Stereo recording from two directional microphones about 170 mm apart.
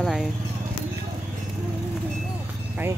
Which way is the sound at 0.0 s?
Centre (ahead or behind).